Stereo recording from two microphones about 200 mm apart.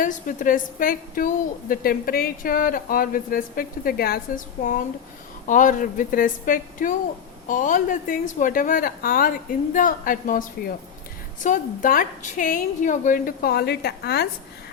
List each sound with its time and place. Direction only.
0.0 s a woman's voice: 40° left (ahead or behind)
11.4 s speech: 40° left (ahead or behind)